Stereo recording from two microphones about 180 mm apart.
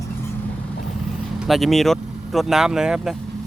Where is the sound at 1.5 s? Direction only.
Centre (ahead or behind).